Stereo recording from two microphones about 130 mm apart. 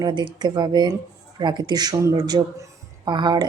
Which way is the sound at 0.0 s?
35° right (ahead or behind).